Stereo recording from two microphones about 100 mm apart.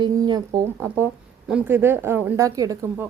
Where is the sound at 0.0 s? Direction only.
50° right (ahead or behind).